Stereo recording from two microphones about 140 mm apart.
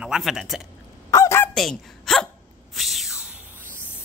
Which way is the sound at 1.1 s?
20° left (ahead or behind).